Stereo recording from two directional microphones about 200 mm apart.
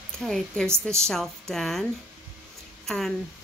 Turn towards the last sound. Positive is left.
turn(degrees=0)  # may be behind; listen again after turning